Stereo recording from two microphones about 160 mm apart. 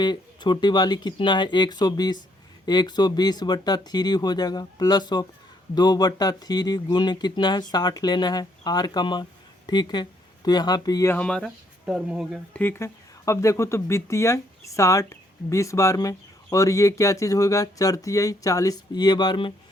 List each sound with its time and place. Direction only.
0.0 s speech: 30° left (ahead or behind); by 12.4 s 5° right (ahead or behind)
12.5 s speech: 15° left (ahead or behind); by 19.5 s 30° left (ahead or behind)